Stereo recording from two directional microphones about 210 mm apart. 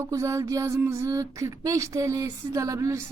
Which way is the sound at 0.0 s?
15° right (ahead or behind).